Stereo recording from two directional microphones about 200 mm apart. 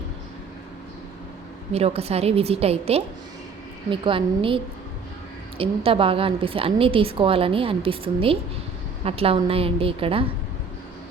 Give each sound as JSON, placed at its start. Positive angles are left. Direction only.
{"t": 1.7, "sound": "a woman's voice", "side_deg": -30}